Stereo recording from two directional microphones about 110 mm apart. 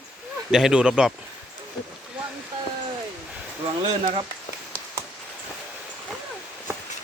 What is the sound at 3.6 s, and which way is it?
Speech, 50° right (ahead or behind).